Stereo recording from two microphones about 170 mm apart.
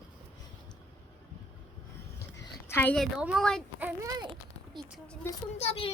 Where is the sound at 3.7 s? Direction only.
10° right (ahead or behind).